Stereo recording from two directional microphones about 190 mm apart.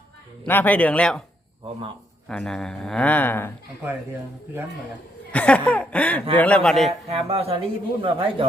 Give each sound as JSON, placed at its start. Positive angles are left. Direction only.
{"t": 0.4, "sound": "chuckle", "side_deg": 10}
{"t": 2.2, "sound": "a man's voice", "side_deg": 5}
{"t": 5.3, "sound": "chuckle", "side_deg": 5}
{"t": 6.3, "sound": "a man's voice", "side_deg": 5}
{"t": 7.1, "sound": "a man's voice", "side_deg": -30}